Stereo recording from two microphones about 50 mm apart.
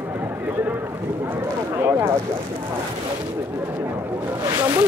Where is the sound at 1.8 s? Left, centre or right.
Right.